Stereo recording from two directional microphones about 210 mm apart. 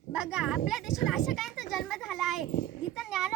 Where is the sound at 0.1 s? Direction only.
5° right (ahead or behind).